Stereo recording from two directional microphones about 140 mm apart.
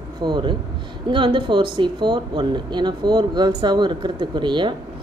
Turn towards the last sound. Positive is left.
turn(degrees=-35)  # may be behind; listen again after turning